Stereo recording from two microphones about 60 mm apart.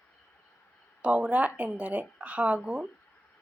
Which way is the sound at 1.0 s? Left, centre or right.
Centre.